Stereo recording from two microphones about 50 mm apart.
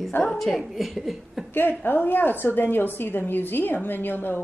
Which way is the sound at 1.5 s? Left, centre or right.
Left.